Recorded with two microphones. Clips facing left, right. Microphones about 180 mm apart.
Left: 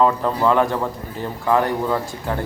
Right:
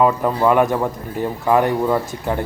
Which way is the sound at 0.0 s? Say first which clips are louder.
Right 2 dB; 10° right (ahead or behind).